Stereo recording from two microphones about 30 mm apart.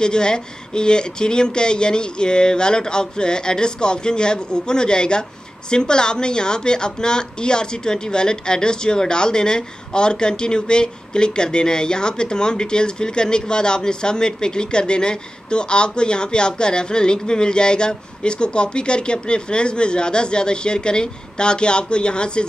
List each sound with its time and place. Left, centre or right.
0.0 s a woman's voice: left